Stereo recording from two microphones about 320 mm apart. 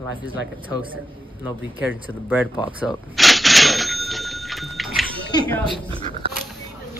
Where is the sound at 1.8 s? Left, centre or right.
Centre.